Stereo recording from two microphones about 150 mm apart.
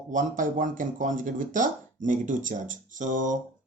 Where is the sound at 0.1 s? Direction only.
60° right (ahead or behind).